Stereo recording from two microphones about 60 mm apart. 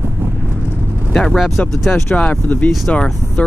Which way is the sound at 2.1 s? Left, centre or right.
Left.